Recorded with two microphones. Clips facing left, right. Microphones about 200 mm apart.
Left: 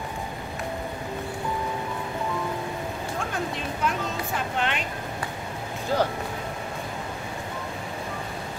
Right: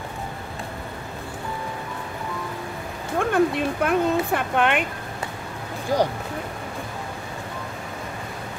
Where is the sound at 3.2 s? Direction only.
60° right (ahead or behind).